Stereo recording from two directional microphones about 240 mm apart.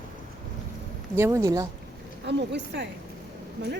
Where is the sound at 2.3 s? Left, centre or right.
Right.